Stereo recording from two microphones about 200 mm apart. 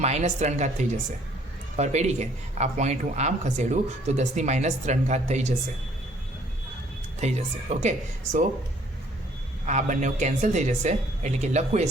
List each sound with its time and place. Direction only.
0.0 s speech: 35° right (ahead or behind)
7.2 s speech: 35° right (ahead or behind)
9.6 s speech: 35° right (ahead or behind)